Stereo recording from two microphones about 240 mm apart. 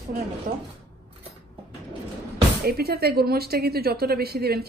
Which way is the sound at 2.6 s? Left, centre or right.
Right.